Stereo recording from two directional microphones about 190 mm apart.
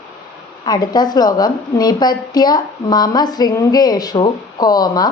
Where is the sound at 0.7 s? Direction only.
20° left (ahead or behind).